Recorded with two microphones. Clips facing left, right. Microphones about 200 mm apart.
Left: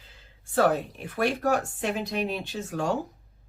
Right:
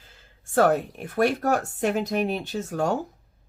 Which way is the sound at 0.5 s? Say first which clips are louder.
Right 3 dB; 50° right (ahead or behind).